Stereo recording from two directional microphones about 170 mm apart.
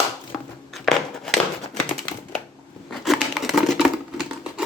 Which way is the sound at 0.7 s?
Centre (ahead or behind).